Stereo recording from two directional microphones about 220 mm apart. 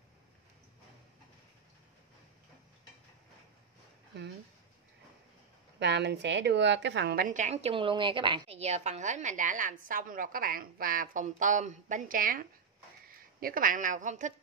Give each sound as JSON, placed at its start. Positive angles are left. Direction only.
{"t": 5.8, "sound": "a woman's voice", "side_deg": -50}